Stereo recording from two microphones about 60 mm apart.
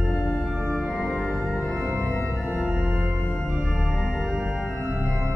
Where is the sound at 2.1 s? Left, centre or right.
Left.